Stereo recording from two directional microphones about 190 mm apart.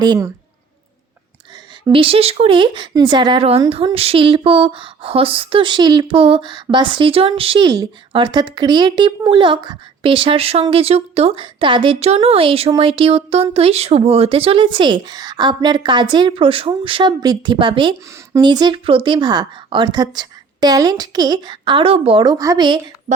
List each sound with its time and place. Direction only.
0.0 s speech: 20° right (ahead or behind)
1.9 s speech: 30° right (ahead or behind)